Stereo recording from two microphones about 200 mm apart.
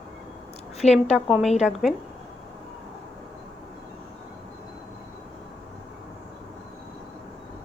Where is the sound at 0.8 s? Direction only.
35° left (ahead or behind).